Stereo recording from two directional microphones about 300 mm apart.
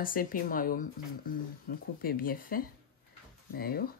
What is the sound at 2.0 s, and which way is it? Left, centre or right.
Speech, left.